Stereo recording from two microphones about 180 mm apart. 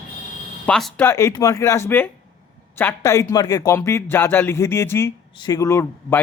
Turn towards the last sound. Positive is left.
turn(degrees=15)  # may be behind; listen again after turning